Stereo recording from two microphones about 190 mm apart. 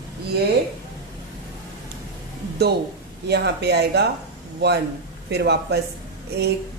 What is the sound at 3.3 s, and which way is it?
Speech, 60° right (ahead or behind).